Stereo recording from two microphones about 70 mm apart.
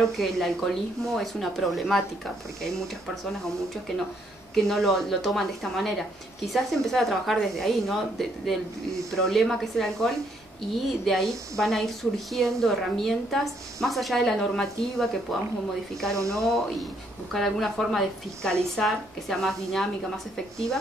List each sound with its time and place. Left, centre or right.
0.0 s a woman's voice: centre
4.6 s a woman's voice: centre
16.2 s speech: right
17.3 s a woman's voice: centre